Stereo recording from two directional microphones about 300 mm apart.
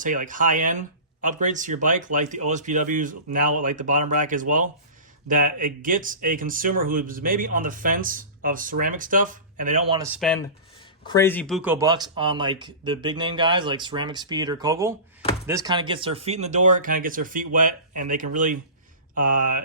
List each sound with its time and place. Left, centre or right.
0.0 s a man's voice: right
10.2 s a man's voice: centre; by 19.6 s right